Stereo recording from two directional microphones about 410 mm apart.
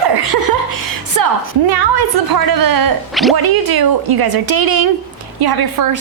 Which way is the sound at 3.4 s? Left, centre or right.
Right.